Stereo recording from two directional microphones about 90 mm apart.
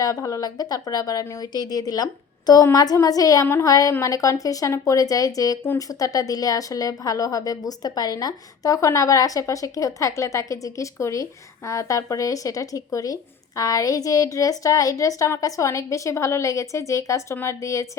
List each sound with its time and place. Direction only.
0.0 s a woman's voice: 35° left (ahead or behind)